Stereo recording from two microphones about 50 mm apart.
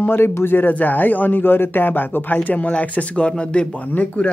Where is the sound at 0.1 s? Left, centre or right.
Left.